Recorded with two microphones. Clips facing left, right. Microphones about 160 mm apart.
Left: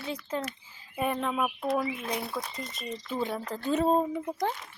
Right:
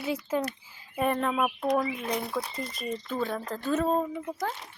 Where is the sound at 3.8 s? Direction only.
30° left (ahead or behind).